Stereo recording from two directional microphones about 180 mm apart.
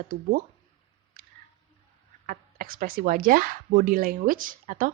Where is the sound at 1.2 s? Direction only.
55° right (ahead or behind).